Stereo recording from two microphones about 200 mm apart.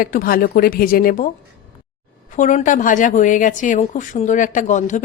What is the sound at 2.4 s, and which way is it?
A woman's voice, 40° left (ahead or behind).